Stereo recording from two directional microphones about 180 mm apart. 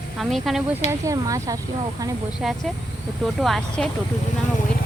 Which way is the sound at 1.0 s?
15° right (ahead or behind).